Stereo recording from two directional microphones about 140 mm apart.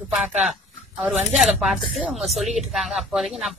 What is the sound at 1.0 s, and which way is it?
A woman's voice, 5° right (ahead or behind).